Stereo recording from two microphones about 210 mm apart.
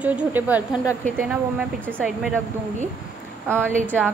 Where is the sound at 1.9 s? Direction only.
5° right (ahead or behind).